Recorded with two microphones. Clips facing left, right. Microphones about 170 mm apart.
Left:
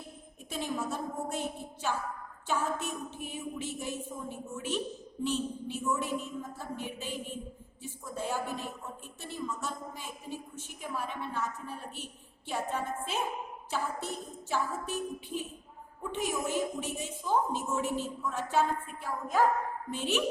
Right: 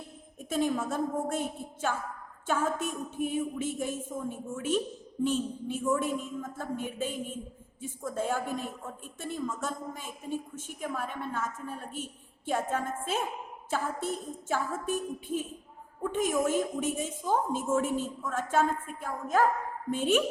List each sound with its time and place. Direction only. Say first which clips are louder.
0.5 s a woman's voice: right 6 dB; 50° right (ahead or behind)
19.9 s a woman's voice: right 6 dB; 50° right (ahead or behind)